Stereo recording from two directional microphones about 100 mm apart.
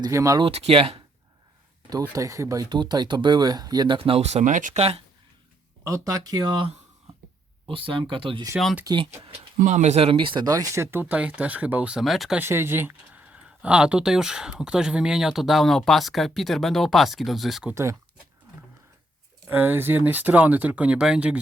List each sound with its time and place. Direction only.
0.1 s speech: 30° right (ahead or behind)
0.5 s speech: 85° right
1.9 s speech: 35° right (ahead or behind)
3.9 s speech: 65° right (ahead or behind)
5.8 s speech: 35° right (ahead or behind); by 6.7 s 50° right (ahead or behind)
7.7 s speech: 60° right (ahead or behind); by 10.2 s 85° right
10.2 s speech: 55° right (ahead or behind)
10.4 s speech: 35° right (ahead or behind)
11.0 s speech: 15° right (ahead or behind)
11.9 s speech: centre (ahead or behind)
12.4 s speech: 25° right (ahead or behind); by 17.7 s centre (ahead or behind)
19.5 s speech: 20° right (ahead or behind)